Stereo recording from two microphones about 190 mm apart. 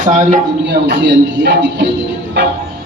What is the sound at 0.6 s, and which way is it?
A man's voice, 65° right (ahead or behind).